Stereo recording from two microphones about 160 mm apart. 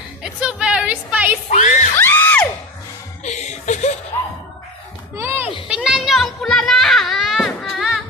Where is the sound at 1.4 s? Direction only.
50° left (ahead or behind).